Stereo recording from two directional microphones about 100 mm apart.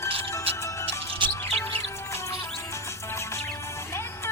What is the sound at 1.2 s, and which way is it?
Music, 55° right (ahead or behind).